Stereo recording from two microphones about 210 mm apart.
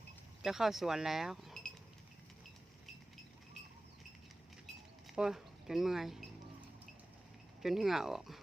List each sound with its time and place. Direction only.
0.4 s speech: centre (ahead or behind)
5.1 s speech: centre (ahead or behind)
7.6 s speech: centre (ahead or behind)